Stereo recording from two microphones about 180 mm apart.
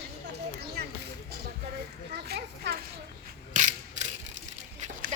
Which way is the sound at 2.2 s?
65° right (ahead or behind).